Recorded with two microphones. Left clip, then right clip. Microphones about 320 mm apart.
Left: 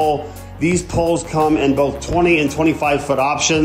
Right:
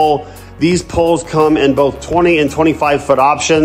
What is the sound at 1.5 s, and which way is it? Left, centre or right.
Speech, centre.